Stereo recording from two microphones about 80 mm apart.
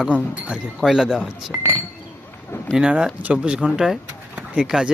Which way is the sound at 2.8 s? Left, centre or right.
Centre.